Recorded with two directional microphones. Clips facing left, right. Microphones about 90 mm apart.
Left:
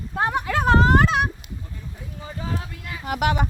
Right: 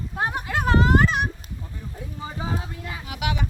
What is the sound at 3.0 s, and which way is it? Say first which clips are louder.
Speech: left 7 dB; 50° left (ahead or behind).